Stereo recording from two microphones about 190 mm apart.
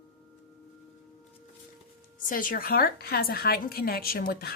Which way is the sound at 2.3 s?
45° left (ahead or behind).